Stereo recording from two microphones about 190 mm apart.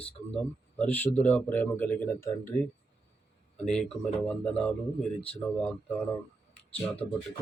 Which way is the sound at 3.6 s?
5° left (ahead or behind).